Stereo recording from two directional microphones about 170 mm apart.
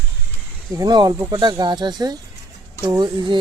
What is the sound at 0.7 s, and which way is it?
Speech, 25° right (ahead or behind).